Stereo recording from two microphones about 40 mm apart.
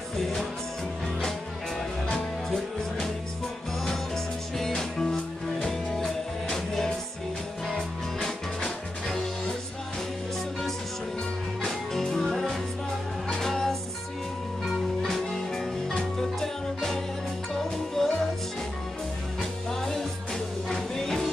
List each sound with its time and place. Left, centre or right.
4.6 s music: centre
5.9 s music: centre
8.6 s music: centre
11.6 s music: centre
19.7 s music: centre